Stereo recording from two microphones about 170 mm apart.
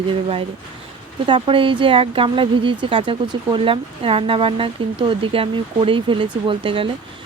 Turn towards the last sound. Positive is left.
turn(degrees=-30)  # may be behind; listen again after turning